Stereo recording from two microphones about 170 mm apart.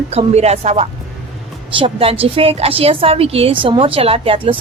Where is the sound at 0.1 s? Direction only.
40° right (ahead or behind).